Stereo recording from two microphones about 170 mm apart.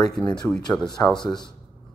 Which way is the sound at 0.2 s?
5° left (ahead or behind).